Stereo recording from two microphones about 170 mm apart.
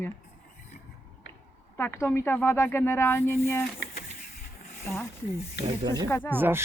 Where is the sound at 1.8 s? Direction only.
15° left (ahead or behind).